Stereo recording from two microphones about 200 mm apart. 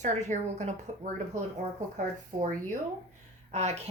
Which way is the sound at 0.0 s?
35° right (ahead or behind).